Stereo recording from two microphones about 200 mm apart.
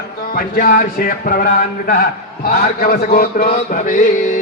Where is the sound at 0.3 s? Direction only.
50° left (ahead or behind).